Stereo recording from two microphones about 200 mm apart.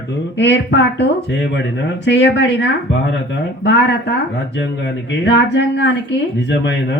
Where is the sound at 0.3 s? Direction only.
60° left (ahead or behind).